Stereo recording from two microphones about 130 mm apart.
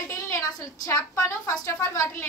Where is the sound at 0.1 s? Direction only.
25° left (ahead or behind).